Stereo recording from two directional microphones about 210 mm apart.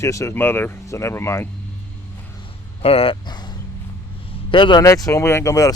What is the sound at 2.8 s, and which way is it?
A man's voice, 25° left (ahead or behind).